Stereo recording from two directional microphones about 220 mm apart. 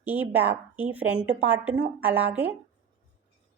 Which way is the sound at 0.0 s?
10° right (ahead or behind).